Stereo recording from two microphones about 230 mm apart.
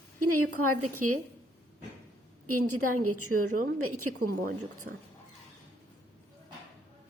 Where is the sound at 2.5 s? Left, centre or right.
Right.